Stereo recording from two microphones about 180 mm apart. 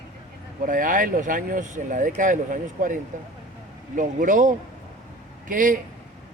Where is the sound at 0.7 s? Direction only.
50° right (ahead or behind).